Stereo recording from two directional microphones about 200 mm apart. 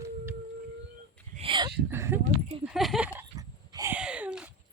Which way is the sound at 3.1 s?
15° right (ahead or behind).